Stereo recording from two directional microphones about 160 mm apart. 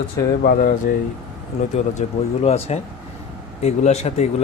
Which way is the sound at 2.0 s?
45° left (ahead or behind).